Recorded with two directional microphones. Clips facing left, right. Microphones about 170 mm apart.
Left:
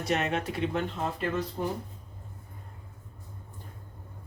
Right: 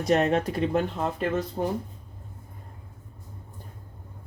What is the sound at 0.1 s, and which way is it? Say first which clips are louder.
Speech: right 7 dB; 40° right (ahead or behind).